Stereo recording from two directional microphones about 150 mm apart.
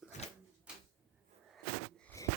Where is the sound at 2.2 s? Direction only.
20° left (ahead or behind).